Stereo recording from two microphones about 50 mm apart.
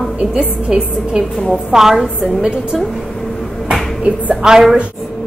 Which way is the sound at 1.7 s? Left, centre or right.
Centre.